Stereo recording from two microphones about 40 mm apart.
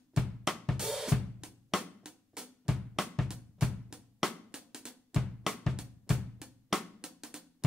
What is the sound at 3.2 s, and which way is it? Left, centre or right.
Drum, centre.